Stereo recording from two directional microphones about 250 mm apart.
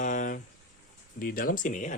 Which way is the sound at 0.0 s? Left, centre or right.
Left.